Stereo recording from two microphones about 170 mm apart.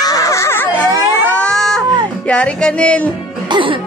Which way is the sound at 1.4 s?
5° left (ahead or behind).